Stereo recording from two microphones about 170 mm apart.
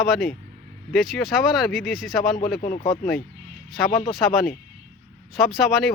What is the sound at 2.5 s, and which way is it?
Speech, 50° left (ahead or behind).